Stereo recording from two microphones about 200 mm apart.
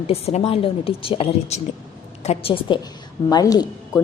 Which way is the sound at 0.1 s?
30° left (ahead or behind).